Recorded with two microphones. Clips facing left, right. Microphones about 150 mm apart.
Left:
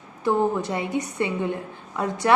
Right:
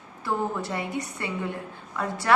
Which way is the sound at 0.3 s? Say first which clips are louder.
Left 6 dB; 20° left (ahead or behind).